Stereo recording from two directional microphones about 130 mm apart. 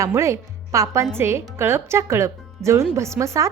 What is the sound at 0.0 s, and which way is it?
A woman's voice, 20° right (ahead or behind).